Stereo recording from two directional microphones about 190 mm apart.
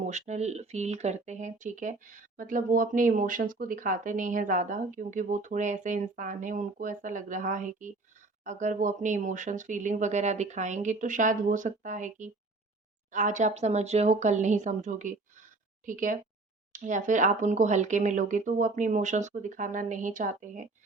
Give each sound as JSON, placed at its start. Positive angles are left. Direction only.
{"t": 0.0, "sound": "speech", "side_deg": -40}